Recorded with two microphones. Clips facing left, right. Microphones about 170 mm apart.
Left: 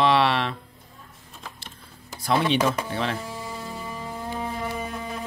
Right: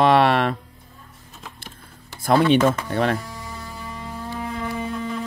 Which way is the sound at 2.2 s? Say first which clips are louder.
Right 6 dB; 50° right (ahead or behind).